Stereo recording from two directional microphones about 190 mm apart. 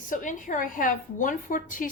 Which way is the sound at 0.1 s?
45° left (ahead or behind).